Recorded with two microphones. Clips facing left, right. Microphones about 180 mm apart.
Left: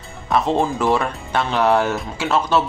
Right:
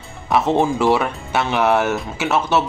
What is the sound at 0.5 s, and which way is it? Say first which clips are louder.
Speech: right 4 dB; 20° right (ahead or behind).